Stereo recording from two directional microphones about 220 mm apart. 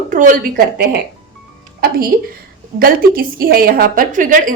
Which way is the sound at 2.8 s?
40° right (ahead or behind).